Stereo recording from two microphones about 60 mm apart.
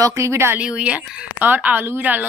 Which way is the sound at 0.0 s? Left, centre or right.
Right.